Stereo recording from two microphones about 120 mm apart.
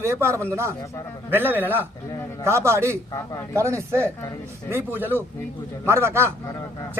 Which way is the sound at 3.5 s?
25° right (ahead or behind).